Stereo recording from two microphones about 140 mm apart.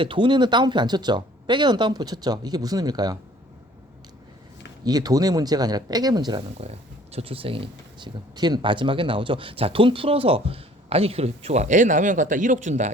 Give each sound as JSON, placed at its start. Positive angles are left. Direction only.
{"t": 0.0, "sound": "speech", "side_deg": -35}
{"t": 4.9, "sound": "speech", "side_deg": -30}
{"t": 6.6, "sound": "speech", "side_deg": -45}